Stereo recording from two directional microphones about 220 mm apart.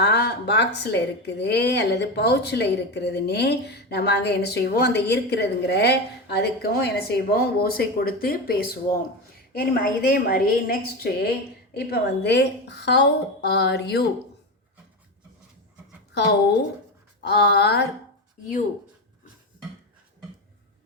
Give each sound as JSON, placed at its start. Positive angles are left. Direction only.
{"t": 0.0, "sound": "speech", "side_deg": 50}
{"t": 17.2, "sound": "speech", "side_deg": 50}